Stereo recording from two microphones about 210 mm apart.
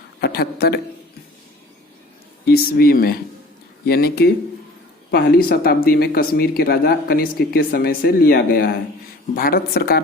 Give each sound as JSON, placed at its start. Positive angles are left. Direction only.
{"t": 0.2, "sound": "a man's voice", "side_deg": 50}
{"t": 2.4, "sound": "speech", "side_deg": 45}